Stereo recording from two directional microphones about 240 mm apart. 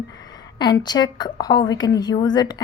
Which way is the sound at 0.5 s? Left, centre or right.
Centre.